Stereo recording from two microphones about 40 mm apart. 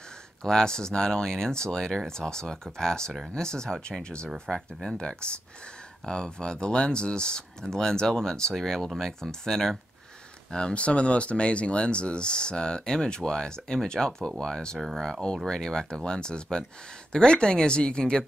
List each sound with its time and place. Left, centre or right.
0.4 s speech: centre
10.5 s speech: left